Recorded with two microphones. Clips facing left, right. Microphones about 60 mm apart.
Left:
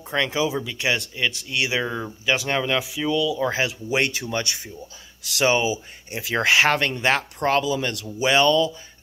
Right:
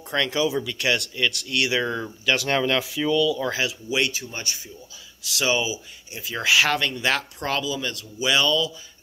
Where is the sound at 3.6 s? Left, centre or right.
Left.